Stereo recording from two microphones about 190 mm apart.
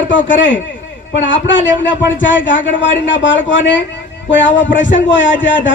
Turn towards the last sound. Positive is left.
turn(degrees=75)  # may be behind; listen again after turning